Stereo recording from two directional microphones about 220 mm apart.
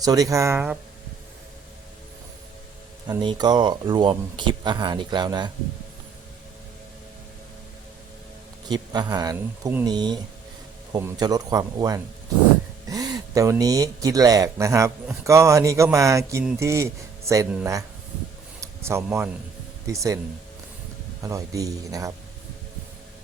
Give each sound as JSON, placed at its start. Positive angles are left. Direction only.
{"t": 0.0, "sound": "speech", "side_deg": -15}
{"t": 3.1, "sound": "speech", "side_deg": -20}
{"t": 8.7, "sound": "speech", "side_deg": -20}
{"t": 21.2, "sound": "speech", "side_deg": -15}